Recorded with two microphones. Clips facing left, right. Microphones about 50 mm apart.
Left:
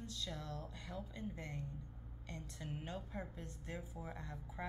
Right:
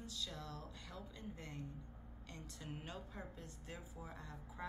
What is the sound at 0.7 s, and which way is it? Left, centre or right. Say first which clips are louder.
Speech: left 4 dB; left.